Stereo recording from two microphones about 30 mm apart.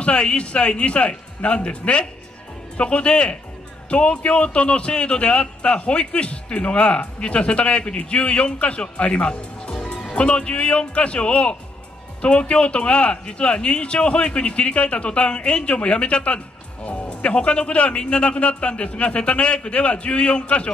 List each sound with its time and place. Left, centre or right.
0.0 s a man's voice: left